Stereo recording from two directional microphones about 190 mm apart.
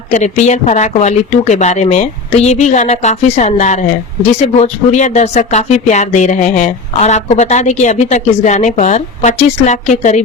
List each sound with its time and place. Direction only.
0.1 s speech: 40° left (ahead or behind)